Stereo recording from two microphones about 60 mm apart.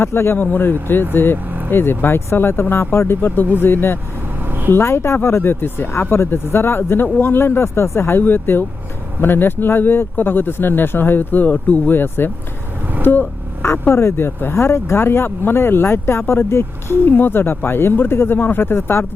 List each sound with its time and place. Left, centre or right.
0.0 s speech: left
3.2 s speech: left
4.7 s speech: left